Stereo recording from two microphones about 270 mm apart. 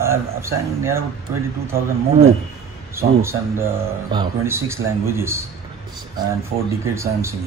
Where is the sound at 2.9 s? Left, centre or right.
Centre.